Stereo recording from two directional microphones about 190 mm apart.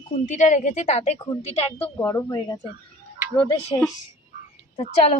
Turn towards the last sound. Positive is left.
turn(degrees=35)  # may be behind; listen again after turning